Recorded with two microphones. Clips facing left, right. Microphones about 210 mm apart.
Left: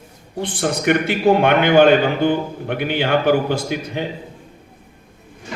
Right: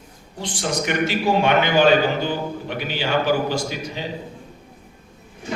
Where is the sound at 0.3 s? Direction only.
55° left (ahead or behind).